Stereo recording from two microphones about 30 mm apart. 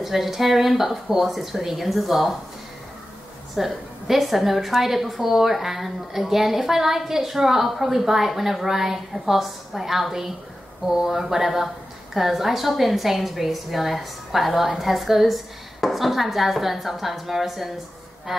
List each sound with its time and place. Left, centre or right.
0.0 s a woman's voice: centre
3.5 s a woman's voice: centre